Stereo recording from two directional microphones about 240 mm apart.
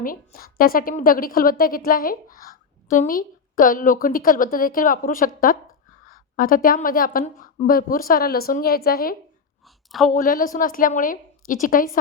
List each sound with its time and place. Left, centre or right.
0.0 s a woman's voice: left